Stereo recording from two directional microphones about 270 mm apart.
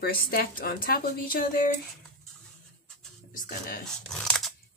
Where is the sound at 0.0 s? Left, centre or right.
Left.